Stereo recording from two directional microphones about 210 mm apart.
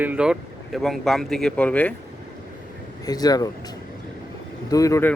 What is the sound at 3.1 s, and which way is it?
Speech, 20° left (ahead or behind).